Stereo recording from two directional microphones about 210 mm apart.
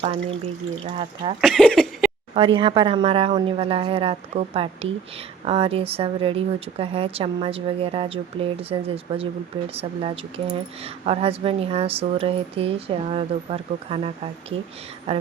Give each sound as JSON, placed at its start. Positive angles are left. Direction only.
{"t": 0.0, "sound": "speech", "side_deg": -25}
{"t": 1.4, "sound": "a sound", "side_deg": 5}
{"t": 2.3, "sound": "speech", "side_deg": -25}